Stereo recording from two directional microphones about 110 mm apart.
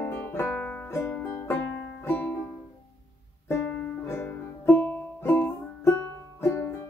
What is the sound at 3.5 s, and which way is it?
Music, 20° left (ahead or behind).